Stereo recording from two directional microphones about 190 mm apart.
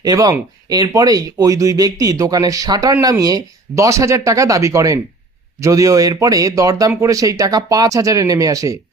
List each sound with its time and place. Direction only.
0.0 s speech: 20° right (ahead or behind)